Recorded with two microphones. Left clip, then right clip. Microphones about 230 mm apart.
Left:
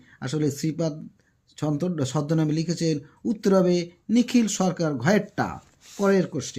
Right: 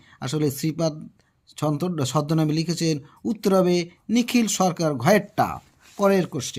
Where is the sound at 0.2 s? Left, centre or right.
Right.